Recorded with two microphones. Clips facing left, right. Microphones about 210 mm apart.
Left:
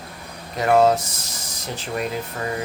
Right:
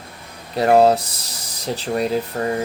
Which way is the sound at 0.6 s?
35° right (ahead or behind).